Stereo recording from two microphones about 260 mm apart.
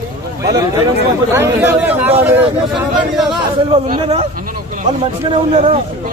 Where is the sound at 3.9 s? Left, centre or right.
Right.